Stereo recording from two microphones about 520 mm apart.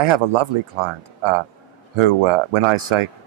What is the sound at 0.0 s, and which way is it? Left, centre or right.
A man's voice, right.